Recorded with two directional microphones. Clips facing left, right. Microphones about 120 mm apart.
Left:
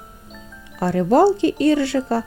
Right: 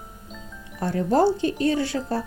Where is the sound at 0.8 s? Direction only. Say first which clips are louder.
Left 5 dB; 90° left.